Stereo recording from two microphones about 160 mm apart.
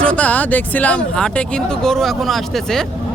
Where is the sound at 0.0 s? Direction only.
5° left (ahead or behind).